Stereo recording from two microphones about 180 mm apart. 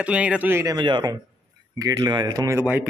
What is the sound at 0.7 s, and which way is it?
Speech, 25° right (ahead or behind).